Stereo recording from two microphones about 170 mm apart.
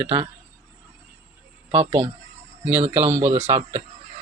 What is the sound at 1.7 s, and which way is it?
Speech, 35° right (ahead or behind).